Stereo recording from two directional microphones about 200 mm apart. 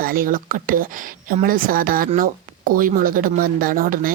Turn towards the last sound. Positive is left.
turn(degrees=-45)  # may be behind; listen again after turning